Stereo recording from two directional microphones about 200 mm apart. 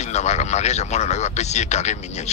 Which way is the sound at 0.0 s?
35° left (ahead or behind).